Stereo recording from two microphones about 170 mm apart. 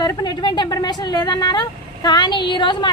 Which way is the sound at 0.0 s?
25° left (ahead or behind).